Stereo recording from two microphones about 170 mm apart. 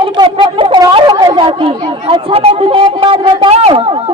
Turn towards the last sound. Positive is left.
turn(degrees=-35)  # may be behind; listen again after turning